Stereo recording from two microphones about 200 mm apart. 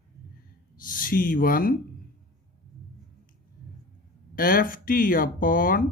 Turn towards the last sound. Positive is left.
turn(degrees=45)  # may be behind; listen again after turning